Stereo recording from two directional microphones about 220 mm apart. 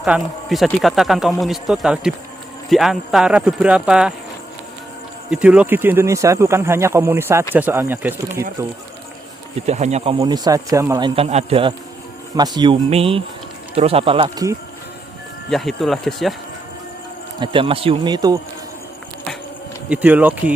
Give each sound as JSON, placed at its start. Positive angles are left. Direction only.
{"t": 0.0, "sound": "speech", "side_deg": 0}
{"t": 5.3, "sound": "speech", "side_deg": -5}
{"t": 9.6, "sound": "speech", "side_deg": -30}
{"t": 15.4, "sound": "speech", "side_deg": 0}
{"t": 17.4, "sound": "speech", "side_deg": -25}
{"t": 19.9, "sound": "speech", "side_deg": -5}